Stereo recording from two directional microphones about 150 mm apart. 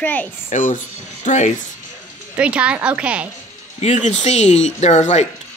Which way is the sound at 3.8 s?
50° left (ahead or behind).